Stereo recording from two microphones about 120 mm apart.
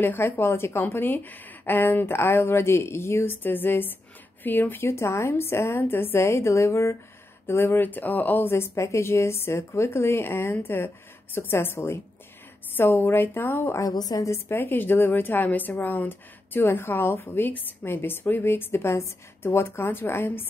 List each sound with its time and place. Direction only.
0.0 s a woman's voice: 15° left (ahead or behind)